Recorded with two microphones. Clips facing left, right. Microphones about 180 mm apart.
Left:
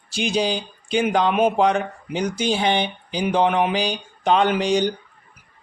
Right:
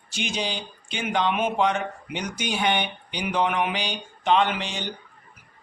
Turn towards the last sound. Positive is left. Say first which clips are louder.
# left 10 dB
turn(degrees=40)  # may be behind; listen again after turning